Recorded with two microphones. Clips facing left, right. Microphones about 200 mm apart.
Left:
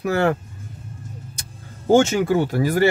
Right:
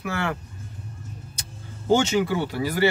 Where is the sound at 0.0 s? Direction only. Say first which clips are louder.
Left 9 dB; 40° left (ahead or behind).